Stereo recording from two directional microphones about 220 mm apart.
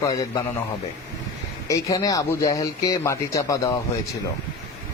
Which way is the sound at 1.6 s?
15° left (ahead or behind).